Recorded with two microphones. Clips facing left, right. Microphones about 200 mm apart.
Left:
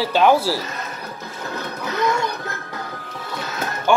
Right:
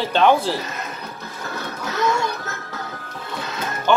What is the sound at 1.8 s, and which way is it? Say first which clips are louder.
Music: even; 15° left (ahead or behind).